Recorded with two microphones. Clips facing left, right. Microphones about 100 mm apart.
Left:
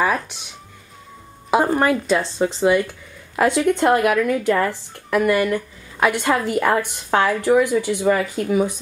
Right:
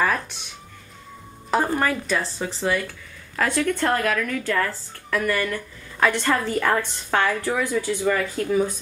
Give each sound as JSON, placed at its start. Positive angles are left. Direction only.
{"t": 0.0, "sound": "music", "side_deg": 10}
{"t": 1.5, "sound": "speech", "side_deg": 20}